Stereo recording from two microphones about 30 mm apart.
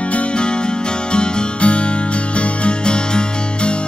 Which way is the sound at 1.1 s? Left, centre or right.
Left.